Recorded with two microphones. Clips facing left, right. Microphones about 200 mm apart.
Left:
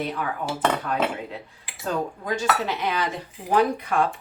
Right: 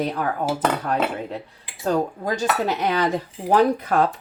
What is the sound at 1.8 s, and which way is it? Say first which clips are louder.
Speech: right 5 dB; 35° right (ahead or behind).